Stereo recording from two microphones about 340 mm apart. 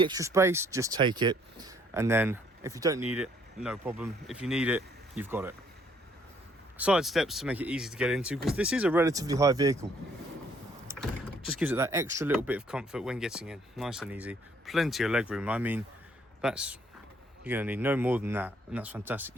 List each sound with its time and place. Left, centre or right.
0.0 s speech: centre
6.7 s speech: centre
11.5 s speech: centre